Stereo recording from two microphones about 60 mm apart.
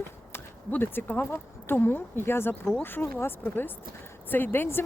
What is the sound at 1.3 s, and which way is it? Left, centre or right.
Speech, left.